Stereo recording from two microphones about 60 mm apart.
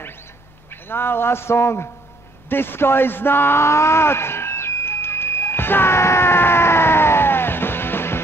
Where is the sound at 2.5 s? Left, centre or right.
Left.